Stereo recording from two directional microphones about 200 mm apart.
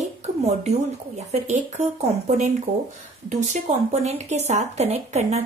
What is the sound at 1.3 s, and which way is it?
Speech, 35° right (ahead or behind).